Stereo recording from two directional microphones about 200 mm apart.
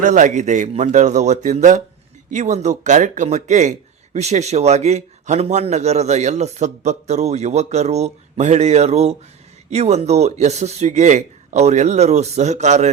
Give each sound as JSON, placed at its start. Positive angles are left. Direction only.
{"t": 0.0, "sound": "speech", "side_deg": -40}